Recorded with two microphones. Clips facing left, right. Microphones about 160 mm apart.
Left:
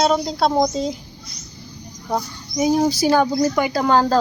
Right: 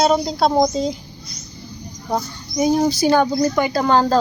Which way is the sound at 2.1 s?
Centre (ahead or behind).